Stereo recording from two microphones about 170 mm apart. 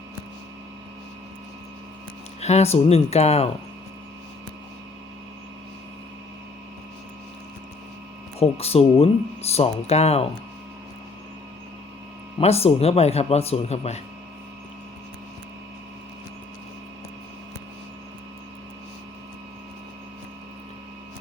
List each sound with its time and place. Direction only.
2.4 s speech: 40° left (ahead or behind)
8.4 s speech: 35° left (ahead or behind)
12.4 s speech: 35° left (ahead or behind)